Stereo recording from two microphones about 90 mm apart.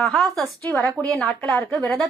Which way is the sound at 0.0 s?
Centre (ahead or behind).